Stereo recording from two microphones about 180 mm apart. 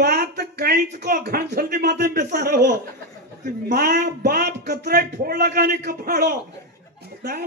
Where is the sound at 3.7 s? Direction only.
60° right (ahead or behind).